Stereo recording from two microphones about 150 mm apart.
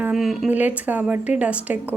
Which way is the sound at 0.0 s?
Centre (ahead or behind).